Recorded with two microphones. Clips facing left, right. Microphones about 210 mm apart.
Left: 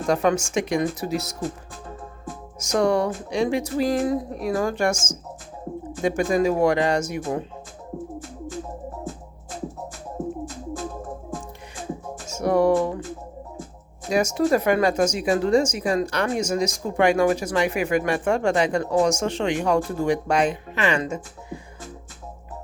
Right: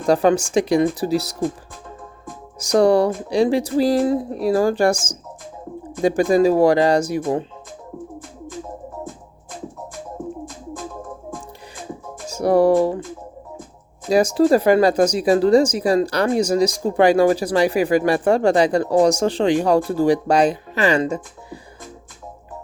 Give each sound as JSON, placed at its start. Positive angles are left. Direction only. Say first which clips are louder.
{"t": 0.1, "sound": "speech", "louder": "right 5 dB", "side_deg": -35}
{"t": 2.6, "sound": "speech", "louder": "right 6 dB", "side_deg": -35}
{"t": 12.3, "sound": "speech", "louder": "right 4 dB", "side_deg": -35}
{"t": 14.1, "sound": "speech", "louder": "right 5 dB", "side_deg": -35}